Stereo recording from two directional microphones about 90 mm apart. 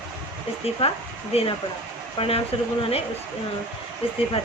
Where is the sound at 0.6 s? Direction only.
90° left.